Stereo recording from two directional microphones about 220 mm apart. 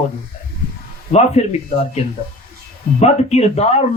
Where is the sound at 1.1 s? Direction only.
30° left (ahead or behind).